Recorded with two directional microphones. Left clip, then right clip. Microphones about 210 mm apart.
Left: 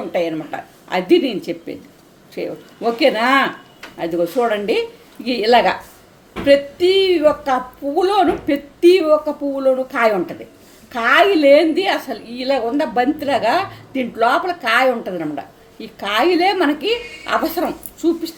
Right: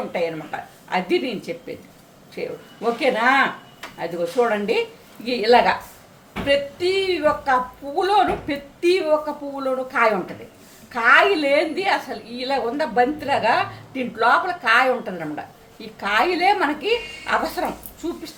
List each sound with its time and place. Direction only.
0.1 s a woman's voice: 30° left (ahead or behind)